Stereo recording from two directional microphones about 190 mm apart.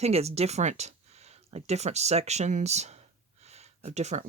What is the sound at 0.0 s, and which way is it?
Speech, 35° right (ahead or behind).